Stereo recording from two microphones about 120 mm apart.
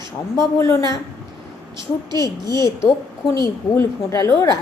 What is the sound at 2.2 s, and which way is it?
Speech, 30° left (ahead or behind).